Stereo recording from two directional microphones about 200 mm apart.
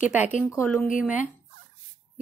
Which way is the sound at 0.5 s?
10° left (ahead or behind).